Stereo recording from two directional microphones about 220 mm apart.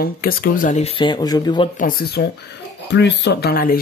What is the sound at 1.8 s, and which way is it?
Speech, 40° left (ahead or behind).